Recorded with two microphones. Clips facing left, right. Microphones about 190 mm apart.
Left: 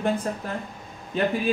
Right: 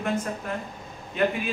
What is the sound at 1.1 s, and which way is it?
Speech, 35° left (ahead or behind).